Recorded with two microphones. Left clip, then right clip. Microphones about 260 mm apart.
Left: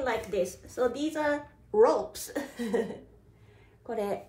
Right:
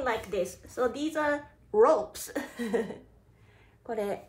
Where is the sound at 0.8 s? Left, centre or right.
Centre.